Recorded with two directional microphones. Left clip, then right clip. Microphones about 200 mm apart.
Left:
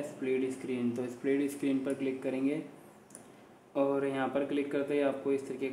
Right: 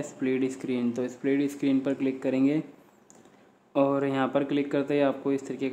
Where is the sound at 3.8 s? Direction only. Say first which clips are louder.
Right 6 dB; 30° right (ahead or behind).